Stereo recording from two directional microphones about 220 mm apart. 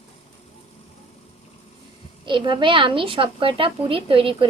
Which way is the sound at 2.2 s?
20° right (ahead or behind).